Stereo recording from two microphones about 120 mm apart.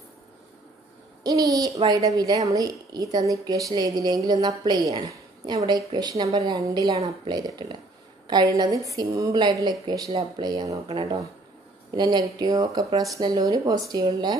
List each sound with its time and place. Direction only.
1.2 s a woman's voice: 30° right (ahead or behind)